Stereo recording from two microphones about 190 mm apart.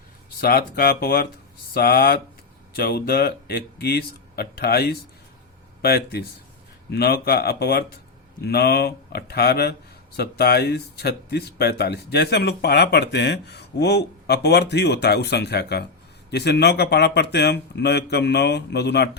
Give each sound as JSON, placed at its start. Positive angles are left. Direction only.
{"t": 0.3, "sound": "speech", "side_deg": 55}